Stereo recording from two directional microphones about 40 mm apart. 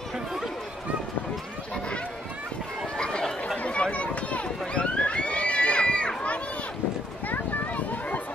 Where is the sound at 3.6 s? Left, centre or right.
Left.